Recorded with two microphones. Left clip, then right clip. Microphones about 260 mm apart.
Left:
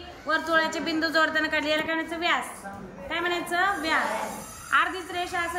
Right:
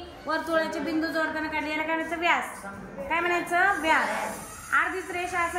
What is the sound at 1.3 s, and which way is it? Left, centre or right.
Speech, centre.